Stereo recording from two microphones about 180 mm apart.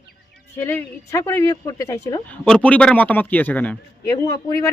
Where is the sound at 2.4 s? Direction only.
5° left (ahead or behind).